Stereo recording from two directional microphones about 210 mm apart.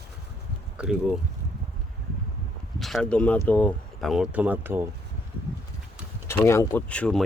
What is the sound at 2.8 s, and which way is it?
Speech, centre (ahead or behind).